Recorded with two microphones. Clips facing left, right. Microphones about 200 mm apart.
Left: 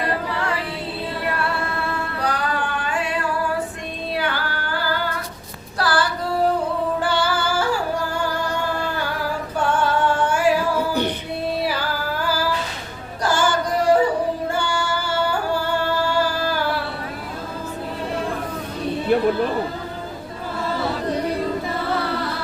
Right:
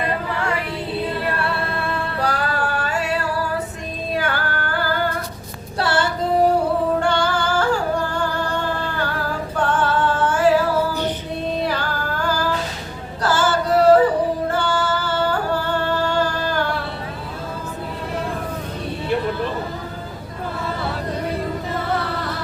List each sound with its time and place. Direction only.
2.3 s a sound: 40° right (ahead or behind)
4.1 s music: 45° right (ahead or behind)
5.8 s female singing: 25° right (ahead or behind)
7.0 s female singing: 5° left (ahead or behind)
9.6 s singing: 10° left (ahead or behind)
11.4 s music: 10° left (ahead or behind)
14.5 s singing: 10° left (ahead or behind)